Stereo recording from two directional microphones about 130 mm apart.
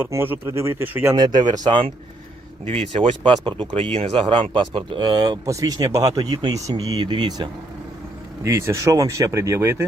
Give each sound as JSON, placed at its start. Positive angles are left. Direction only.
{"t": 0.0, "sound": "speech", "side_deg": -15}
{"t": 1.1, "sound": "speech", "side_deg": -35}
{"t": 3.0, "sound": "speech", "side_deg": -40}
{"t": 8.4, "sound": "speech", "side_deg": -25}